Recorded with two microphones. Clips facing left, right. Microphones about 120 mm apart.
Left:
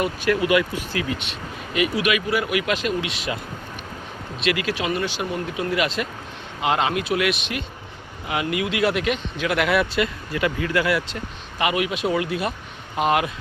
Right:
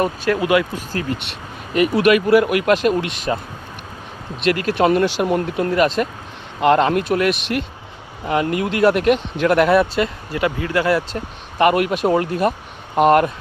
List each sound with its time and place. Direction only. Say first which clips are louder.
0.3 s speech: right 1 dB; 25° right (ahead or behind)
1.7 s speech: right 7 dB; 45° right (ahead or behind)
4.4 s speech: right 7 dB; 45° right (ahead or behind); by 5.3 s 65° right (ahead or behind)
5.3 s speech: right 6 dB; 45° right (ahead or behind)
6.6 s speech: right 7 dB; 55° right (ahead or behind)
9.6 s speech: right 4 dB; 35° right (ahead or behind)
11.5 s speech: right 7 dB; 55° right (ahead or behind)